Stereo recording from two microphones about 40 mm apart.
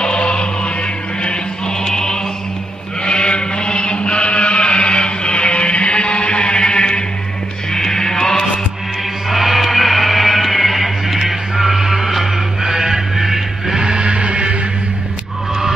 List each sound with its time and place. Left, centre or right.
0.0 s music: left
1.9 s music: centre
3.1 s chant: left
7.7 s music: centre
9.3 s a sound: centre
11.2 s music: centre
13.8 s music: right